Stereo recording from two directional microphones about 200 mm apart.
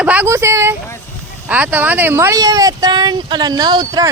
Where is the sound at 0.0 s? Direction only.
5° right (ahead or behind).